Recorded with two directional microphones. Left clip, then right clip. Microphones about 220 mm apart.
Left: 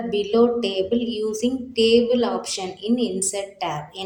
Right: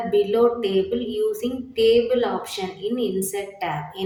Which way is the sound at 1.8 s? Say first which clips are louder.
Even; 50° left (ahead or behind).